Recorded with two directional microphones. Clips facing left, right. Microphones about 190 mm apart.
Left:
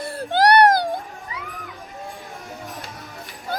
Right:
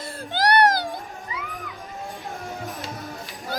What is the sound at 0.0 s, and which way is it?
Baby cry, 60° left (ahead or behind).